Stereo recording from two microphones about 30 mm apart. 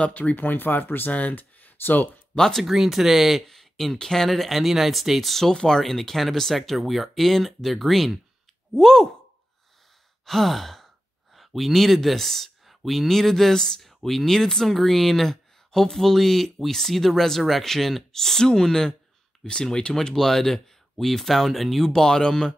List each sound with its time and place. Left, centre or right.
0.4 s speech: left
2.6 s speech: centre
3.4 s speech: centre
4.3 s speech: centre
5.5 s speech: left
5.8 s speech: centre
8.7 s speech: centre
10.2 s sigh: centre
11.3 s speech: centre
12.6 s a sound: centre
13.1 s speech: centre
13.7 s speech: centre
14.2 s speech: centre
21.8 s speech: centre